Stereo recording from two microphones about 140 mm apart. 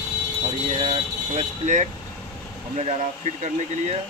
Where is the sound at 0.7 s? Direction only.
50° right (ahead or behind).